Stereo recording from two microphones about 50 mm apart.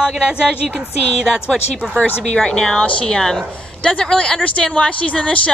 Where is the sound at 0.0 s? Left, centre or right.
Centre.